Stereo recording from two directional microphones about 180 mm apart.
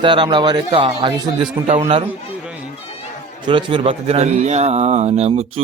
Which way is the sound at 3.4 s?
30° right (ahead or behind).